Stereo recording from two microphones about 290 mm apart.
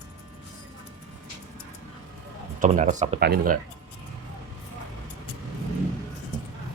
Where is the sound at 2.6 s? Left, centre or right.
Right.